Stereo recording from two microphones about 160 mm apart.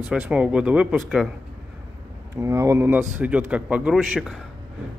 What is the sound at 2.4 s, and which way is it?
A man's voice, 20° right (ahead or behind).